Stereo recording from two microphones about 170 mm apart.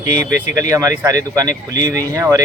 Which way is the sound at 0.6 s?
20° right (ahead or behind).